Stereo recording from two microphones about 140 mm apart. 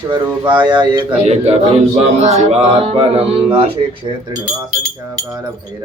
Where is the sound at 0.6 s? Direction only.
35° right (ahead or behind).